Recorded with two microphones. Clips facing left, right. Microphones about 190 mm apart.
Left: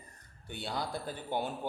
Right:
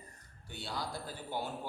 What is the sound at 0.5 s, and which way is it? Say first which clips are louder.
Speech: left 4 dB; 55° left (ahead or behind).